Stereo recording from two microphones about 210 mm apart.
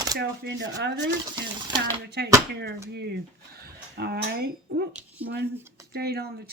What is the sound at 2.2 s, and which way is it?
Speech, 50° right (ahead or behind).